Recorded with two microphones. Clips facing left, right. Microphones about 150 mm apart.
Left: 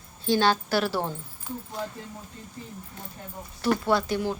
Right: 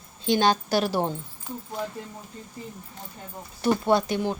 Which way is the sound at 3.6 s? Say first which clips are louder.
Right 2 dB; 20° right (ahead or behind).